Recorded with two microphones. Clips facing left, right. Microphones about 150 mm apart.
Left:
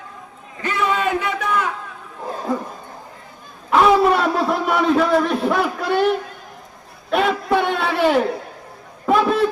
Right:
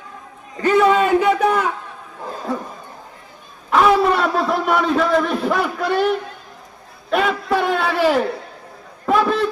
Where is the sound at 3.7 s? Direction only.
5° left (ahead or behind).